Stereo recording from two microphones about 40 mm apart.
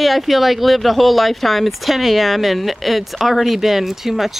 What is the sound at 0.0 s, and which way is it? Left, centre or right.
Speech, centre.